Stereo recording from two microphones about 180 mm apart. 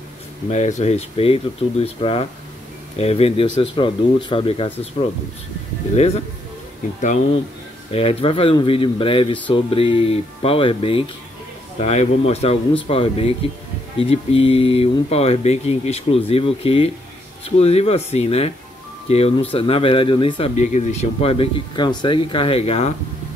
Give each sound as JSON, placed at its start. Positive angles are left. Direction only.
{"t": 0.5, "sound": "speech", "side_deg": 40}
{"t": 5.9, "sound": "speech", "side_deg": 35}